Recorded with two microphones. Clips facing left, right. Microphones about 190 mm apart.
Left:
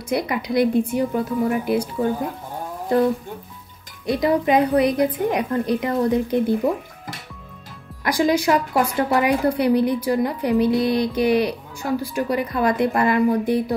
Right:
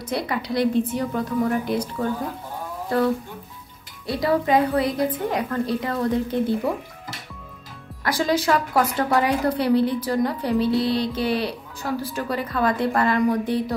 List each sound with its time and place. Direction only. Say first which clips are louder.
0.1 s a woman's voice: left 4 dB; 15° left (ahead or behind)
4.0 s a woman's voice: left 3 dB; 20° left (ahead or behind)
8.0 s a woman's voice: left 3 dB; 15° left (ahead or behind)